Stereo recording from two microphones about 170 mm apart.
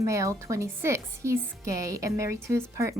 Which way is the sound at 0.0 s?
20° right (ahead or behind).